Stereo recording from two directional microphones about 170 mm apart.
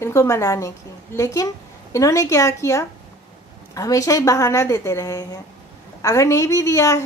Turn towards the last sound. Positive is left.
turn(degrees=20)  # may be behind; listen again after turning